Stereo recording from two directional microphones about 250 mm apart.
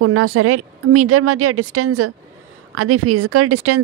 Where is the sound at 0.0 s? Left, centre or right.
Right.